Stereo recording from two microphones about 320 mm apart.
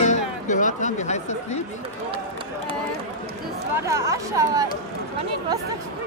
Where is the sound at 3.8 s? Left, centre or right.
Centre.